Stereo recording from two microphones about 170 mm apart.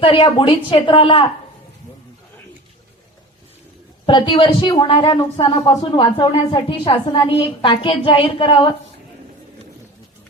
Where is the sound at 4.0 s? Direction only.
30° left (ahead or behind).